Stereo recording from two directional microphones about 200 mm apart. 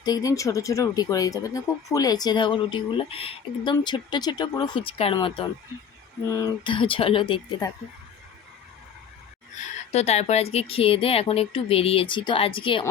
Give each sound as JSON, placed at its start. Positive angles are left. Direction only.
{"t": 0.0, "sound": "speech", "side_deg": 20}
{"t": 9.9, "sound": "speech", "side_deg": 30}